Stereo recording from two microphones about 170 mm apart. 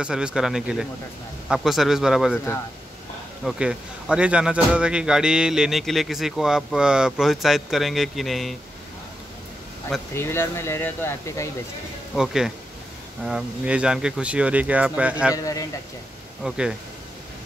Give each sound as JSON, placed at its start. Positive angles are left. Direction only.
{"t": 0.0, "sound": "speech", "side_deg": -5}
{"t": 3.4, "sound": "speech", "side_deg": -5}
{"t": 10.1, "sound": "speech", "side_deg": 15}
{"t": 12.2, "sound": "speech", "side_deg": 0}
{"t": 15.3, "sound": "a man's voice", "side_deg": 20}
{"t": 16.4, "sound": "speech", "side_deg": -5}